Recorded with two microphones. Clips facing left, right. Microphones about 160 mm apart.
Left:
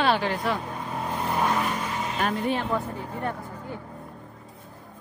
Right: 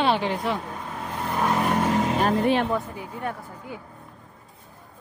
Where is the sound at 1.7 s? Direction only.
75° right (ahead or behind).